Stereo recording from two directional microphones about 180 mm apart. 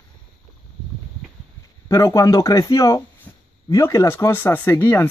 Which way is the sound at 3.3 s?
10° left (ahead or behind).